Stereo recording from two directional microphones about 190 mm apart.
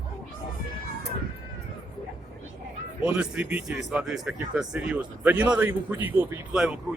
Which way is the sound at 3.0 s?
5° right (ahead or behind).